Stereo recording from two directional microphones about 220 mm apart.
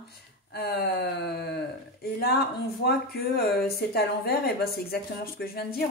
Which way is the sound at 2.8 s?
45° left (ahead or behind).